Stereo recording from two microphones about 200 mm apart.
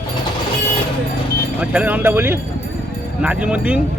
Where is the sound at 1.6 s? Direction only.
5° right (ahead or behind).